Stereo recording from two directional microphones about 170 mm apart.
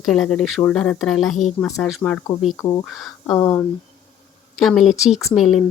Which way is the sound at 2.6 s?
25° left (ahead or behind).